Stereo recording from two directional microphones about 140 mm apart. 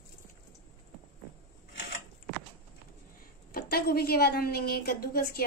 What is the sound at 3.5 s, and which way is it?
A woman's voice, 90° left.